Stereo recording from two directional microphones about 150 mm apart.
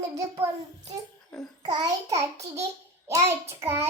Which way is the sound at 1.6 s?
25° right (ahead or behind).